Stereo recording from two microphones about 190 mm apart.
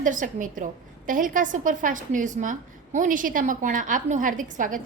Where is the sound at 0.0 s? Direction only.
45° right (ahead or behind).